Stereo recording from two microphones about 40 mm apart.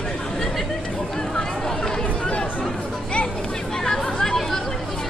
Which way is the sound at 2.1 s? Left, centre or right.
Left.